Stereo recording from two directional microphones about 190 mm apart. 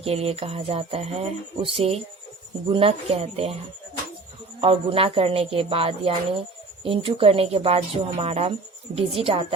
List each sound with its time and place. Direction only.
0.0 s speech: 30° right (ahead or behind)
4.6 s a woman's voice: 30° right (ahead or behind)